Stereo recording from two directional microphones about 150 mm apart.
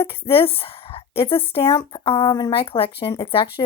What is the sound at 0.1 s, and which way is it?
A woman's voice, 40° left (ahead or behind).